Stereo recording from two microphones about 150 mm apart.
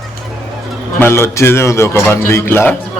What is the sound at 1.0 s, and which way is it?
A man's voice, 15° left (ahead or behind).